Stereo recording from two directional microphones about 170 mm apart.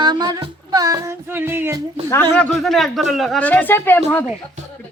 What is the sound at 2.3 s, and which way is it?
Speech, 5° left (ahead or behind).